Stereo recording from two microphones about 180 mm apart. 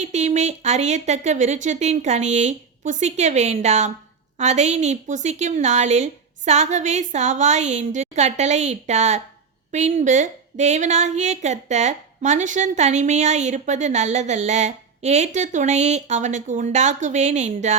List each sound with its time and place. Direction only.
0.0 s a woman's voice: 40° right (ahead or behind)